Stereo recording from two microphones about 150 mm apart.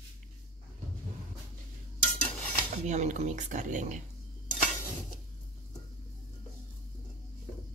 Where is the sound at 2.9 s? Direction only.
50° right (ahead or behind).